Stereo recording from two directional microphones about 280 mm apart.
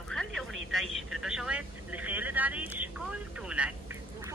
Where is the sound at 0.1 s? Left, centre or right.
Centre.